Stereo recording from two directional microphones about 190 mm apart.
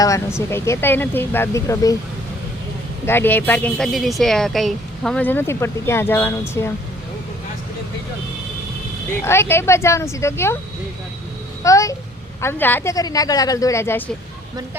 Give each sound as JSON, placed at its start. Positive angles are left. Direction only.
{"t": 0.0, "sound": "speech", "side_deg": 15}
{"t": 3.1, "sound": "speech", "side_deg": 10}
{"t": 9.2, "sound": "speech", "side_deg": 15}
{"t": 11.6, "sound": "speech", "side_deg": 15}